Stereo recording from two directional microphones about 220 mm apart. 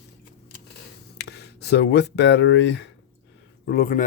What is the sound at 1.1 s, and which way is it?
Speech, 50° left (ahead or behind).